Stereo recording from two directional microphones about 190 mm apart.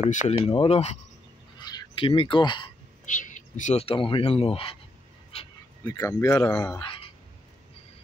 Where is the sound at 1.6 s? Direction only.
20° left (ahead or behind).